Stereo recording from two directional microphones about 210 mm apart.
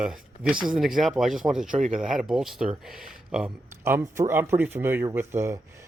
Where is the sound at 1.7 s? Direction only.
35° right (ahead or behind).